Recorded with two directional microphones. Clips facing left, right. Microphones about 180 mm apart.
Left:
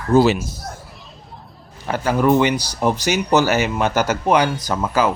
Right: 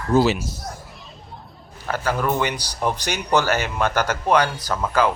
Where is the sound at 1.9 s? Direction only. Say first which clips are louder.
Left 6 dB; 10° left (ahead or behind).